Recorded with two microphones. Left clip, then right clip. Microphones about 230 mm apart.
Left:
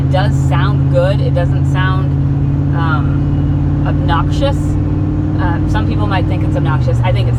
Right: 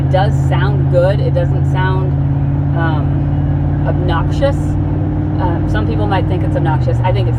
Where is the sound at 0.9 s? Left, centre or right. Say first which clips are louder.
Right 2 dB; right.